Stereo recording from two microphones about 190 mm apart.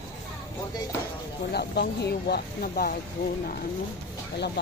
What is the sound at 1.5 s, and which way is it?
Speech, 60° left (ahead or behind).